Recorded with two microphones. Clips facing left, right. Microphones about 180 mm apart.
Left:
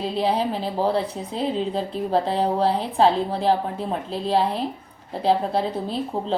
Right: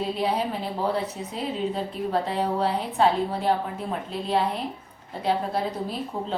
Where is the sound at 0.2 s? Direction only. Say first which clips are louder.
Left 7 dB; 30° left (ahead or behind).